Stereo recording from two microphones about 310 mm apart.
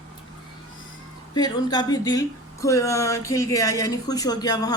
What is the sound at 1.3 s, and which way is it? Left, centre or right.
A woman's voice, centre.